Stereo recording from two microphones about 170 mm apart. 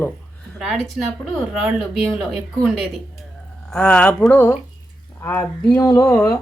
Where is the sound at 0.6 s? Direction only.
Centre (ahead or behind).